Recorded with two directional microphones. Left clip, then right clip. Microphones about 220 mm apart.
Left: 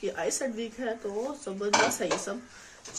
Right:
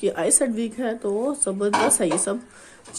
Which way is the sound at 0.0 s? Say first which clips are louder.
Right 8 dB; 50° right (ahead or behind).